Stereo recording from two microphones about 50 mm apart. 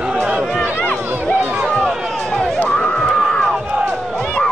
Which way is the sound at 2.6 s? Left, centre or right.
Left.